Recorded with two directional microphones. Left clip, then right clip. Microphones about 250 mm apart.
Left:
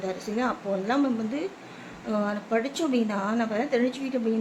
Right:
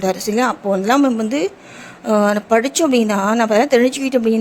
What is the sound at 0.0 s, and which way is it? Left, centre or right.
A woman's voice, right.